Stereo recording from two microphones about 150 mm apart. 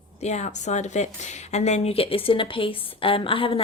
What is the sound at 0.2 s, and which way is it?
A woman's voice, 50° left (ahead or behind).